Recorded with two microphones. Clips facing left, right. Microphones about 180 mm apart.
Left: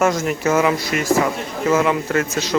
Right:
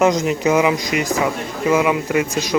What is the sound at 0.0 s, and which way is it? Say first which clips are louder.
Speech: right 2 dB; 20° right (ahead or behind).